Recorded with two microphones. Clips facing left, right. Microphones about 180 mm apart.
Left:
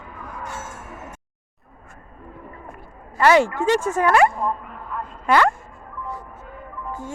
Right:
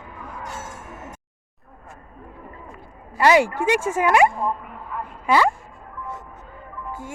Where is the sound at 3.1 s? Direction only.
10° right (ahead or behind).